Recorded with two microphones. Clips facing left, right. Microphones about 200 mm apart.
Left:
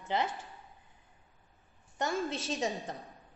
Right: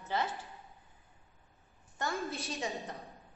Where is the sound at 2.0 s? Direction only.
20° left (ahead or behind).